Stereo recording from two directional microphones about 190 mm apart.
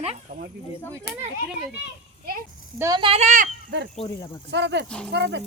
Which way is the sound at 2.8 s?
20° right (ahead or behind).